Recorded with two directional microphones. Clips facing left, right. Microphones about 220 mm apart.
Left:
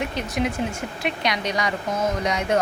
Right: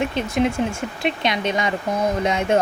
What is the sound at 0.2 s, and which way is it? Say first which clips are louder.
Speech: right 5 dB; 25° right (ahead or behind).